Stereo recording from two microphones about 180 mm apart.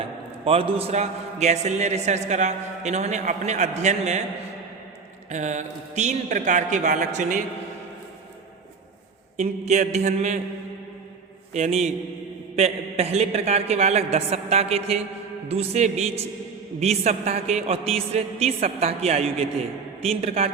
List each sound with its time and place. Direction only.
0.4 s a man's voice: 30° right (ahead or behind)
5.3 s a man's voice: 40° right (ahead or behind)
9.4 s a man's voice: 40° right (ahead or behind)
11.5 s a man's voice: 40° right (ahead or behind)